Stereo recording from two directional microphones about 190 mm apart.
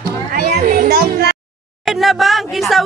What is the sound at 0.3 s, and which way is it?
Children playing, 50° right (ahead or behind).